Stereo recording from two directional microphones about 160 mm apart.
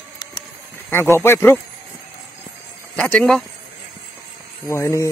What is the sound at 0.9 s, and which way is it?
Speech, 15° left (ahead or behind).